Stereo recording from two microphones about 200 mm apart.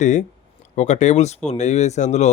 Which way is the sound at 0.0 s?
35° left (ahead or behind).